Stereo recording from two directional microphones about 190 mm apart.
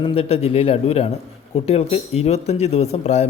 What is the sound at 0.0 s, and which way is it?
Speech, 30° left (ahead or behind).